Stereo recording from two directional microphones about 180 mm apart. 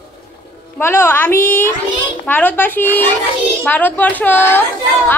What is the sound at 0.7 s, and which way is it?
A woman's voice, 10° left (ahead or behind).